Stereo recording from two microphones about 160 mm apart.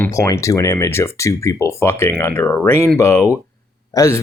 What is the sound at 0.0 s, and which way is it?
Speech, 20° left (ahead or behind).